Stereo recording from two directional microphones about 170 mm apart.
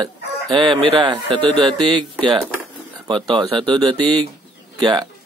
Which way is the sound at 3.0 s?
30° right (ahead or behind).